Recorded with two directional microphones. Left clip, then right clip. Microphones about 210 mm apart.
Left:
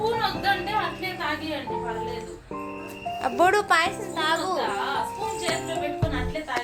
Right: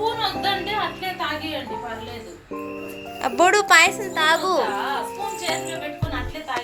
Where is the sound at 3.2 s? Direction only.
10° right (ahead or behind).